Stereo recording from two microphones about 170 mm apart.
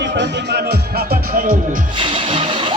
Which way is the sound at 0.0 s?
80° right.